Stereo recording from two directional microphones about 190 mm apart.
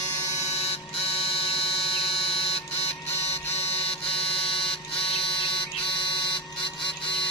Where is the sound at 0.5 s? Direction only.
30° left (ahead or behind).